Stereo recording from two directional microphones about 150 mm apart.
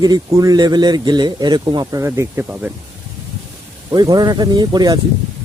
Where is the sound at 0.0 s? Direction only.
25° right (ahead or behind).